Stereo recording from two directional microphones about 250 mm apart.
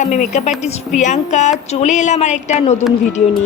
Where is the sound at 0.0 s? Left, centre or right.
Left.